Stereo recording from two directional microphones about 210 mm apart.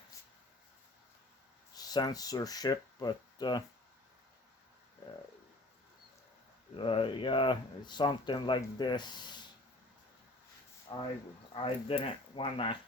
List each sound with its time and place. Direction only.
1.7 s speech: 20° left (ahead or behind)
6.7 s speech: 25° left (ahead or behind)
10.9 s speech: 20° left (ahead or behind)